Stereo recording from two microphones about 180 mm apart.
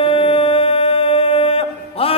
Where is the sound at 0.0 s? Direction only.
30° left (ahead or behind).